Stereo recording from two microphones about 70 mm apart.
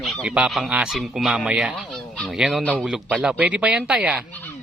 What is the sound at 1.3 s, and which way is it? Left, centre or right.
Speech, centre.